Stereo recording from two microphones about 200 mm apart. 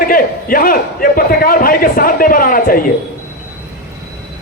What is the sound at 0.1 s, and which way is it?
A man's voice, 45° left (ahead or behind).